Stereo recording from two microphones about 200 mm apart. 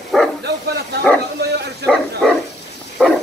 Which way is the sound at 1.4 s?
55° right (ahead or behind).